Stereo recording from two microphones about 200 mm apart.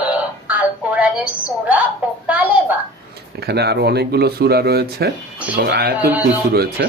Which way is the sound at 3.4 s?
55° right (ahead or behind).